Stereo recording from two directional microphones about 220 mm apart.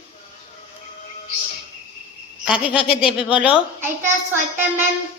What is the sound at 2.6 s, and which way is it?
Speech, 25° left (ahead or behind).